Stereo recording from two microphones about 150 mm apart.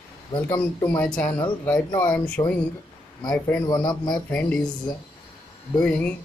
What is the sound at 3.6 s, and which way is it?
Speech, 25° left (ahead or behind).